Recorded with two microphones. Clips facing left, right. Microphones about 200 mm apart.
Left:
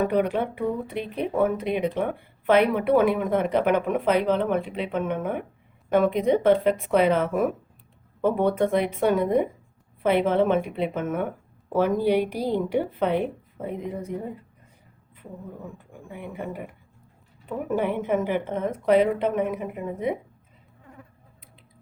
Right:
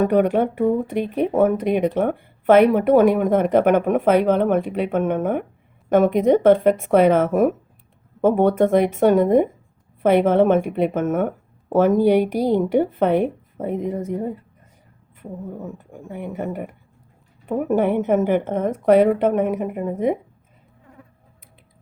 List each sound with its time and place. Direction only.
0.1 s speech: 45° right (ahead or behind)
15.9 s speech: 45° right (ahead or behind)